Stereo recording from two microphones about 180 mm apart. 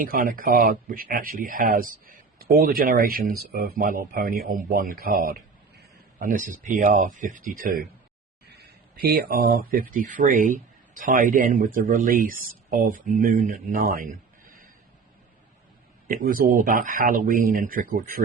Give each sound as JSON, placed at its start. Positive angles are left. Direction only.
{"t": 0.0, "sound": "speech", "side_deg": -50}
{"t": 8.5, "sound": "speech", "side_deg": -60}
{"t": 16.0, "sound": "speech", "side_deg": -50}